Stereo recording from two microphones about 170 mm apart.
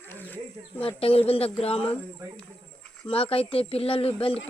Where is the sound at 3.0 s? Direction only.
35° left (ahead or behind).